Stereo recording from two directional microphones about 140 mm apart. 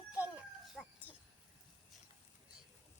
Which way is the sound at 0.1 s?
10° right (ahead or behind).